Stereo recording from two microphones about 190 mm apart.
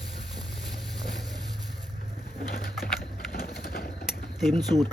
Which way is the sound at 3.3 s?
55° left (ahead or behind).